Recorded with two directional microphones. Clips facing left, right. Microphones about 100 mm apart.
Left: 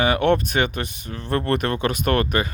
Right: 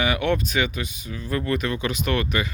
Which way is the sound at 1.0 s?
70° left (ahead or behind).